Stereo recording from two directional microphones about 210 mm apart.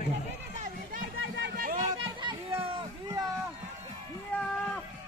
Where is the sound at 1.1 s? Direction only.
65° right (ahead or behind).